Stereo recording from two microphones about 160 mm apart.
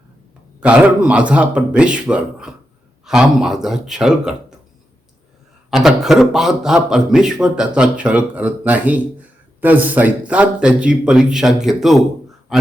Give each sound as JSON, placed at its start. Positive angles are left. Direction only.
{"t": 0.6, "sound": "a man's voice", "side_deg": -5}
{"t": 5.7, "sound": "a man's voice", "side_deg": -5}